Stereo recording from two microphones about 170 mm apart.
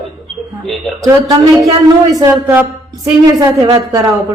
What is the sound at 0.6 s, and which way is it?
Speech, centre (ahead or behind).